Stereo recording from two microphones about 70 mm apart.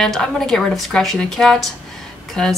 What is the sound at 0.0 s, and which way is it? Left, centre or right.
A woman's voice, centre.